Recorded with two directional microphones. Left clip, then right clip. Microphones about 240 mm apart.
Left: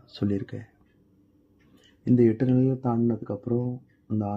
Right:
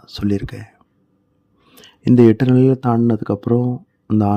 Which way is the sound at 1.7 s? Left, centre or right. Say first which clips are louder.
Right 9 dB; right.